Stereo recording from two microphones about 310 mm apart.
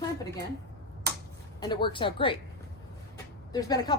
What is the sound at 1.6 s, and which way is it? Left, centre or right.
Speech, centre.